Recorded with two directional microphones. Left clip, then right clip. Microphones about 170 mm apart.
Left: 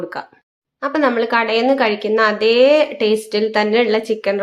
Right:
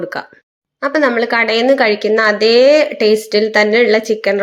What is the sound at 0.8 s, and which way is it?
Speech, 15° right (ahead or behind).